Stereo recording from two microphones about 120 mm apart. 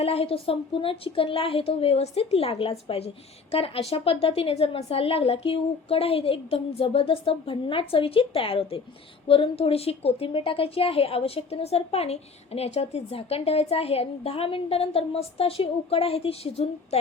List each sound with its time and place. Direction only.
0.0 s a woman's voice: 55° left (ahead or behind)